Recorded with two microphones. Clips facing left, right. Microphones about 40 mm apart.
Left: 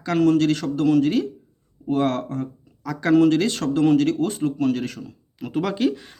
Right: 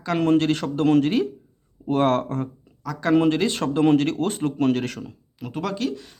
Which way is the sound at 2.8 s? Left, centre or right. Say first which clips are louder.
Left 1 dB; centre.